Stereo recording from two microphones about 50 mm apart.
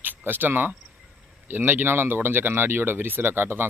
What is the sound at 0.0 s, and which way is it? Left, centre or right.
Speech, right.